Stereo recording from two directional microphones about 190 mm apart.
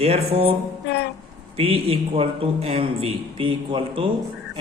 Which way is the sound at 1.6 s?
30° right (ahead or behind).